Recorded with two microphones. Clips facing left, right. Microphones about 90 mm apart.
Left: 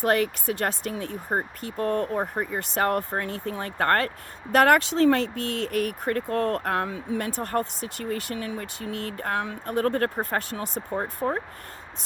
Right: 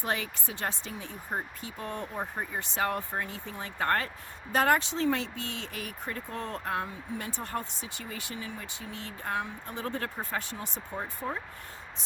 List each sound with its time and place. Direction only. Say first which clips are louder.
0.0 s speech: left 10 dB; 60° left (ahead or behind); by 7.3 s 90° left
7.6 s speech: left 9 dB; 60° left (ahead or behind)
10.9 s speech: left 8 dB; 45° left (ahead or behind)